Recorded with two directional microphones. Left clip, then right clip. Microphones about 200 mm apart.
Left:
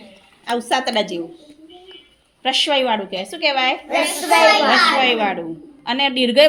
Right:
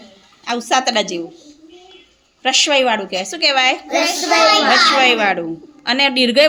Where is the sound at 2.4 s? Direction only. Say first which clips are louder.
Right 3 dB; 10° right (ahead or behind).